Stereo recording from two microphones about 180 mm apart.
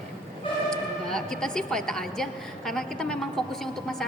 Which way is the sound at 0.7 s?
5° left (ahead or behind).